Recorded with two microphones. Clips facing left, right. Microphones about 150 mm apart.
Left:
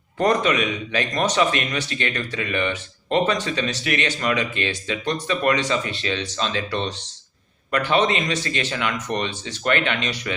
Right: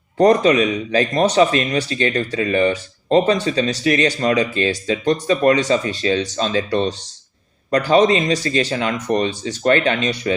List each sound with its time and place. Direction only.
0.2 s speech: 35° right (ahead or behind)